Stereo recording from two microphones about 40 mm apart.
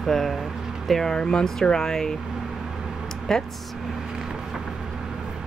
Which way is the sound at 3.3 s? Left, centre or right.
Centre.